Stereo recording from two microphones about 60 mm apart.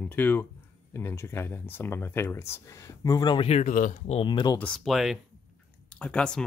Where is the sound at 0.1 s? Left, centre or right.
Left.